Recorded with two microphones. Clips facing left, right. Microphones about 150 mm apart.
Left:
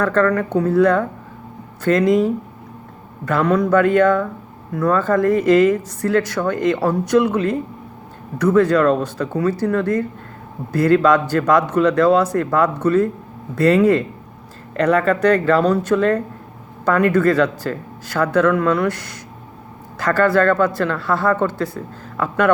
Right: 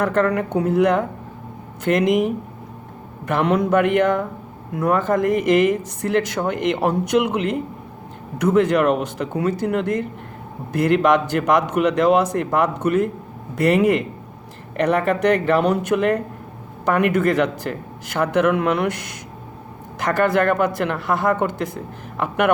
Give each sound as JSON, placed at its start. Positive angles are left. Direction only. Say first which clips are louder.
{"t": 0.0, "sound": "speech", "louder": "left 2 dB", "side_deg": -20}